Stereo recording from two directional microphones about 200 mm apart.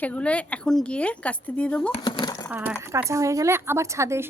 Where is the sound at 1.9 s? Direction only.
20° left (ahead or behind).